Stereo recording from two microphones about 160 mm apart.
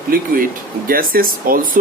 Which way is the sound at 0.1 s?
65° right (ahead or behind).